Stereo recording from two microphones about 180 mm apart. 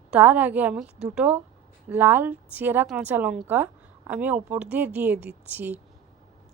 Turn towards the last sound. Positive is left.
turn(degrees=-10)  # may be behind; listen again after turning